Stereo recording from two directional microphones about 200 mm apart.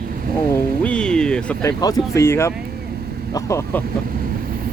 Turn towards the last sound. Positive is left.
turn(degrees=15)  # may be behind; listen again after turning